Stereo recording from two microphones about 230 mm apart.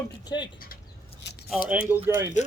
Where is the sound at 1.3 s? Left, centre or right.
Left.